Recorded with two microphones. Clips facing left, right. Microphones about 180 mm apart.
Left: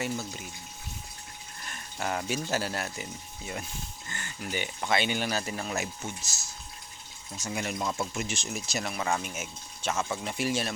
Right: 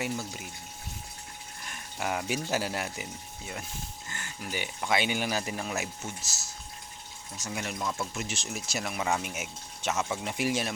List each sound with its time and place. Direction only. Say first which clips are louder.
0.0 s speech: even; 10° right (ahead or behind)
1.7 s speech: even; 10° right (ahead or behind)
7.3 s speech: left 2 dB; centre (ahead or behind)